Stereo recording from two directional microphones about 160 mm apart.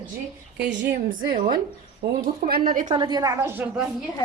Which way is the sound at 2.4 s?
65° right (ahead or behind).